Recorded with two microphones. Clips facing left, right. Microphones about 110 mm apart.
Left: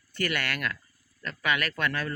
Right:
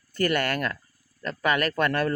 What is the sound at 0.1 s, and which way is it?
Speech, 40° right (ahead or behind).